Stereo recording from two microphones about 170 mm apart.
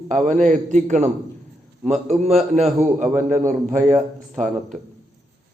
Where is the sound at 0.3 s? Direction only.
45° right (ahead or behind).